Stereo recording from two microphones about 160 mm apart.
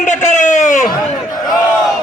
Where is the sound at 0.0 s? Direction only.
50° left (ahead or behind).